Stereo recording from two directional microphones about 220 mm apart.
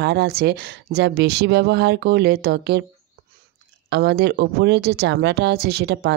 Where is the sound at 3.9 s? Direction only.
50° right (ahead or behind).